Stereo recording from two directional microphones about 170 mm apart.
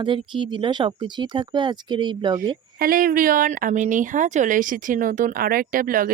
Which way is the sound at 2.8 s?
55° right (ahead or behind).